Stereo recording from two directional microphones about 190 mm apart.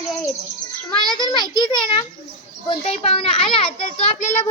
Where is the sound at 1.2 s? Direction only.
20° left (ahead or behind).